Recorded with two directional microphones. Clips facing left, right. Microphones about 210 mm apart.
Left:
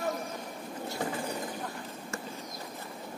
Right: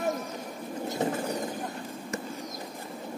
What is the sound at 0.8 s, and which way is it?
Bird, 20° right (ahead or behind).